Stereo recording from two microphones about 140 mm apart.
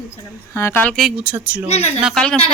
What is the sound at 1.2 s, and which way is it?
Speech, 10° right (ahead or behind).